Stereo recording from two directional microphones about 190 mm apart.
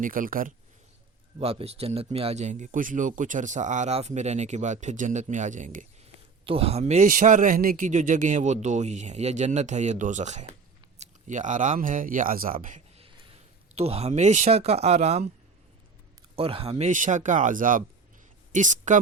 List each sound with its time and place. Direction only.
0.0 s speech: 45° right (ahead or behind)
1.4 s speech: 30° right (ahead or behind)
6.4 s speech: 30° right (ahead or behind); by 12.5 s 50° right (ahead or behind)
12.6 s a sound: 40° right (ahead or behind)
13.7 s speech: 30° right (ahead or behind)
16.3 s speech: 30° right (ahead or behind)